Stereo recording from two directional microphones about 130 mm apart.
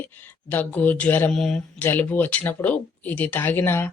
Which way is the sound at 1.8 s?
15° left (ahead or behind).